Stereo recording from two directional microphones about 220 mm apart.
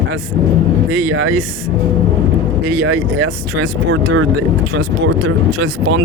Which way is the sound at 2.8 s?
65° right (ahead or behind).